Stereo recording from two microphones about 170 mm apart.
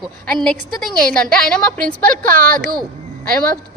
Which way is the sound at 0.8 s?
Centre (ahead or behind).